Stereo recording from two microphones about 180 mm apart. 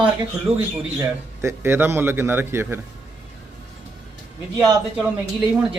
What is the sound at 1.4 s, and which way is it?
Speech, 15° right (ahead or behind).